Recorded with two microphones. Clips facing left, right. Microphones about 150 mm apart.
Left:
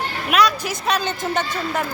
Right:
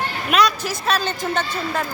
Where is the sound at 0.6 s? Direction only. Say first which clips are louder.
Even; 20° left (ahead or behind).